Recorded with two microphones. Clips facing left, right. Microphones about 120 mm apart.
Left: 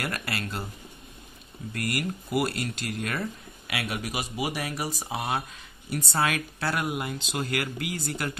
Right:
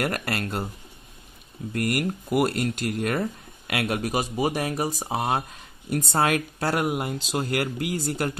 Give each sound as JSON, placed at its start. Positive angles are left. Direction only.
{"t": 0.0, "sound": "speech", "side_deg": -50}
{"t": 1.9, "sound": "speech", "side_deg": -50}